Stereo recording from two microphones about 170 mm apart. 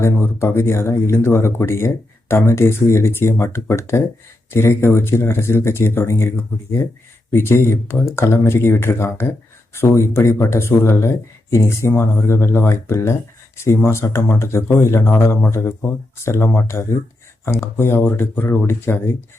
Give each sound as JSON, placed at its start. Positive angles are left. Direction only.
{"t": 0.0, "sound": "speech", "side_deg": 15}